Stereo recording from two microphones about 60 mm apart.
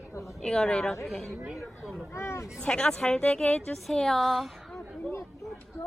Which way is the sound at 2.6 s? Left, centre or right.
Centre.